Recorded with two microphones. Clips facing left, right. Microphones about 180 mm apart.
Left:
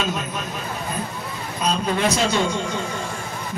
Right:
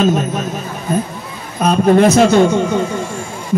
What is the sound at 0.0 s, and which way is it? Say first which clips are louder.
Speech: right 11 dB; 45° right (ahead or behind).